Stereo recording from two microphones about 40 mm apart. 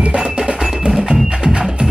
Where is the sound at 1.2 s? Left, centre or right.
Right.